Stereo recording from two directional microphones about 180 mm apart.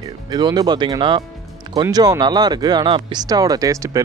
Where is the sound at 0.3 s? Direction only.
25° right (ahead or behind).